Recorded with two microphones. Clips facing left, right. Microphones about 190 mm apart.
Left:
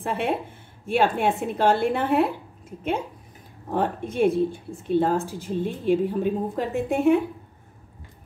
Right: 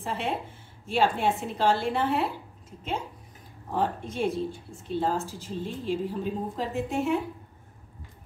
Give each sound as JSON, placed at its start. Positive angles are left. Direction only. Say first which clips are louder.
{"t": 0.0, "sound": "speech", "louder": "left 5 dB", "side_deg": 55}
{"t": 3.7, "sound": "speech", "louder": "left 4 dB", "side_deg": 55}